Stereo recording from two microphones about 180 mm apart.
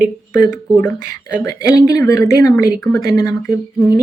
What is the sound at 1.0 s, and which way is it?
Speech, 20° left (ahead or behind).